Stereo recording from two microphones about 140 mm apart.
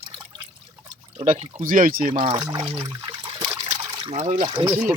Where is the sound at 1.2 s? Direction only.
55° right (ahead or behind).